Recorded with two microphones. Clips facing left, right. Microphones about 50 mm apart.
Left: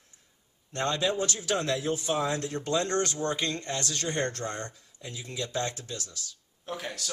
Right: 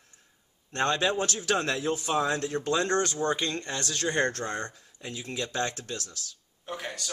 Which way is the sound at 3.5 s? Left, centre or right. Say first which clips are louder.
Right 1 dB; right.